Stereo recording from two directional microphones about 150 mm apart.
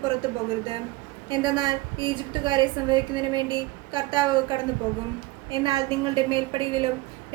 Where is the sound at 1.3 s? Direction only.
30° right (ahead or behind).